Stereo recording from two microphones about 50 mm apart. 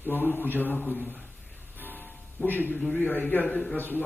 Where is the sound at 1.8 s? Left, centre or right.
Left.